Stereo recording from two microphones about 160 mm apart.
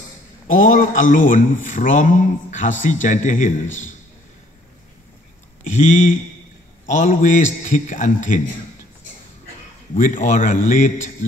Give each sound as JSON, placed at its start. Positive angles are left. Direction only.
{"t": 0.5, "sound": "a man's voice", "side_deg": 55}
{"t": 5.7, "sound": "a man's voice", "side_deg": 45}
{"t": 9.9, "sound": "a man's voice", "side_deg": 55}